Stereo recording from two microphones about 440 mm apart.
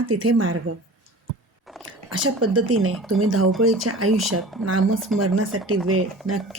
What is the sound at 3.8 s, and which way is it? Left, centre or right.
Speech, right.